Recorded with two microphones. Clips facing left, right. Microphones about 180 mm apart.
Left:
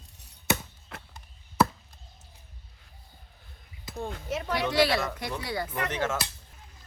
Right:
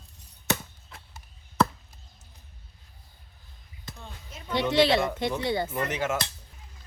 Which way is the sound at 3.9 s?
50° left (ahead or behind).